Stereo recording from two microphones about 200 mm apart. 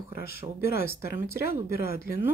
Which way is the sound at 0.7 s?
50° left (ahead or behind).